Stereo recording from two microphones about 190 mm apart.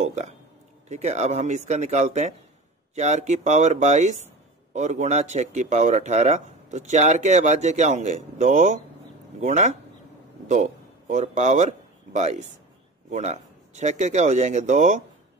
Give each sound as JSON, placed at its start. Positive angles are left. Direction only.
{"t": 0.0, "sound": "speech", "side_deg": -35}